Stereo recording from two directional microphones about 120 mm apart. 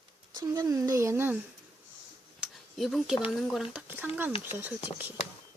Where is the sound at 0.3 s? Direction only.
30° right (ahead or behind).